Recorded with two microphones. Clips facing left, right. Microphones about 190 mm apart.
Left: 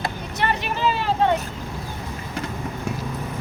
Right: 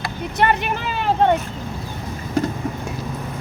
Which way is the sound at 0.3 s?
55° right (ahead or behind).